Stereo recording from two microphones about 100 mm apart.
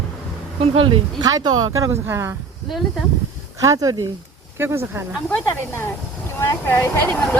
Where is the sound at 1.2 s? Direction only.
40° right (ahead or behind).